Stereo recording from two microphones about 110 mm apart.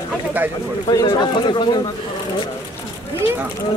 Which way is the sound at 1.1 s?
45° left (ahead or behind).